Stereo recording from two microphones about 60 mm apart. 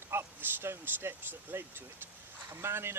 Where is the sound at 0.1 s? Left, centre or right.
Right.